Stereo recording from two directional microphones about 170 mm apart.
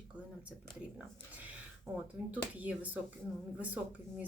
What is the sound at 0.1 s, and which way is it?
Speech, 5° right (ahead or behind).